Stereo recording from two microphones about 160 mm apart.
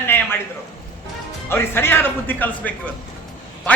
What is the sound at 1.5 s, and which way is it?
A man's voice, 15° left (ahead or behind).